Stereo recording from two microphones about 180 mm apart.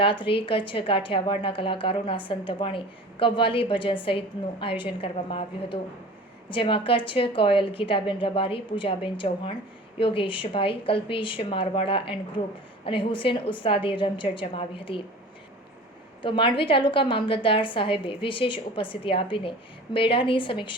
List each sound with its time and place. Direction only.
0.0 s a woman's voice: 30° left (ahead or behind)
16.2 s a woman's voice: 30° left (ahead or behind)